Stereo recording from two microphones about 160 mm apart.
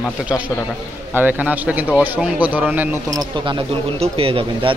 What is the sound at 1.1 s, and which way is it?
A man's voice, 10° right (ahead or behind).